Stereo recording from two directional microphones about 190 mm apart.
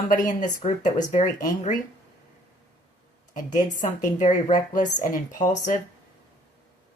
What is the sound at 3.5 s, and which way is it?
Speech, 40° left (ahead or behind).